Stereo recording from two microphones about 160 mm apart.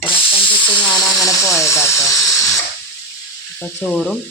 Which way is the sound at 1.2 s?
20° left (ahead or behind).